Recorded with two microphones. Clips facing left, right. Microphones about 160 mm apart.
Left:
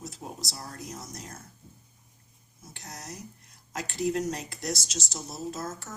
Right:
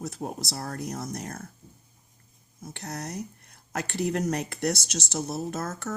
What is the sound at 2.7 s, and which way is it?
Speech, 60° right (ahead or behind).